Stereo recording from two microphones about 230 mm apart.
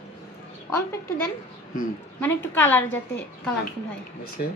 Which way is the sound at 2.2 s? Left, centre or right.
Centre.